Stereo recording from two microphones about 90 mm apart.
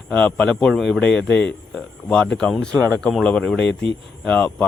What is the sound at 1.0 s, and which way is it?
Speech, 15° left (ahead or behind).